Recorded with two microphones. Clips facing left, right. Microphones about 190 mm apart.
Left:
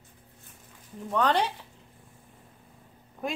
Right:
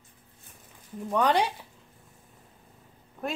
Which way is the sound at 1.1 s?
10° right (ahead or behind).